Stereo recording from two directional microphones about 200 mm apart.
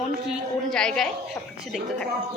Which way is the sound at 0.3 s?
5° left (ahead or behind).